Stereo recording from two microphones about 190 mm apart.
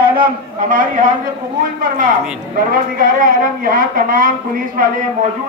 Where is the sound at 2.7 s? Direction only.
45° right (ahead or behind).